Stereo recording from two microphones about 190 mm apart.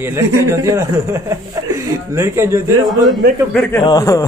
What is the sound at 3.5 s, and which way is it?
Speech, 10° left (ahead or behind).